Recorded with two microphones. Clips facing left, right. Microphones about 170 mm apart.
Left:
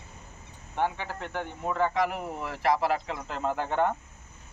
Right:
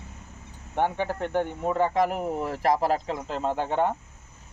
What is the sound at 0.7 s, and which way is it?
Speech, 50° right (ahead or behind).